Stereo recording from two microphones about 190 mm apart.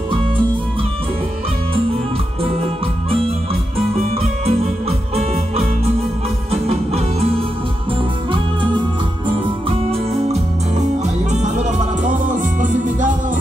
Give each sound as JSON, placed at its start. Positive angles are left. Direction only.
{"t": 2.4, "sound": "music", "side_deg": -30}
{"t": 4.5, "sound": "music", "side_deg": -30}
{"t": 6.5, "sound": "music", "side_deg": -35}
{"t": 9.7, "sound": "music", "side_deg": -30}